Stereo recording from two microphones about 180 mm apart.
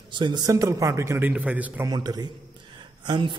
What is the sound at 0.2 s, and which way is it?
A man's voice, 25° right (ahead or behind).